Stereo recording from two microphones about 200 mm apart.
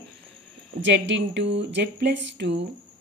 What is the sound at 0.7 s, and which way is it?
Speech, 60° right (ahead or behind).